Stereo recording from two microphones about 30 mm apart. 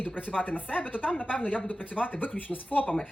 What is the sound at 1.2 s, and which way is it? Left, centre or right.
Speech, left.